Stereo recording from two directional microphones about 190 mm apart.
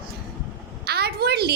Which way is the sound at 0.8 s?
55° right (ahead or behind).